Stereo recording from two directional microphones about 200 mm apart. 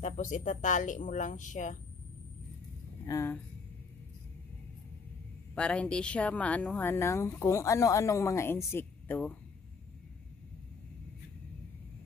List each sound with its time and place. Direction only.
0.0 s speech: 40° left (ahead or behind)
3.1 s a woman's voice: 15° left (ahead or behind)
5.5 s a woman's voice: 5° left (ahead or behind)